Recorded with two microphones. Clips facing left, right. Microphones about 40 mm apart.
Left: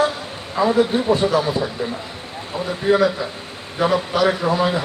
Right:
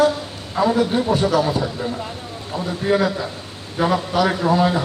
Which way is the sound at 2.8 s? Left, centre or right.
Left.